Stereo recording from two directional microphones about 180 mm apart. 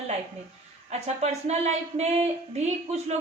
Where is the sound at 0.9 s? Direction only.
40° right (ahead or behind).